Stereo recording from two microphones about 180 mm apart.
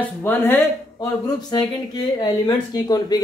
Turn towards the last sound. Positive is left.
turn(degrees=20)  # may be behind; listen again after turning